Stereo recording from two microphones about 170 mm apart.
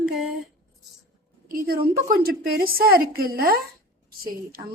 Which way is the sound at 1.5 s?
60° right (ahead or behind).